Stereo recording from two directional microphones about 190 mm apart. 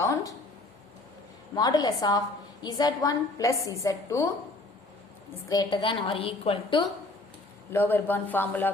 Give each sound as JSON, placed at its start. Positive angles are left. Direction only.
{"t": 0.0, "sound": "a woman's voice", "side_deg": 15}
{"t": 1.5, "sound": "a woman's voice", "side_deg": 20}
{"t": 5.5, "sound": "a woman's voice", "side_deg": 20}
{"t": 7.7, "sound": "a woman's voice", "side_deg": 10}